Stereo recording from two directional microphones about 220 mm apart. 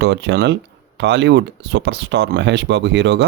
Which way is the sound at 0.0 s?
50° right (ahead or behind).